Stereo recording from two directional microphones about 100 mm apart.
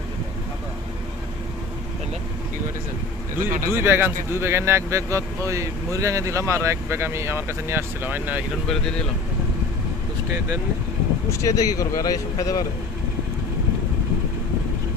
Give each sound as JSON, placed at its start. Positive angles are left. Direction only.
{"t": 3.3, "sound": "speech", "side_deg": -25}
{"t": 11.3, "sound": "speech", "side_deg": 30}